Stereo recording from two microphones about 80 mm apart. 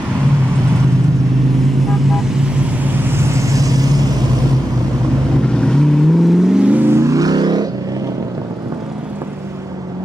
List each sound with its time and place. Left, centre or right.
1.9 s vehicle: centre
2.8 s vehicle: right
5.6 s vehicle: centre
6.7 s vehicle: right
7.0 s music: right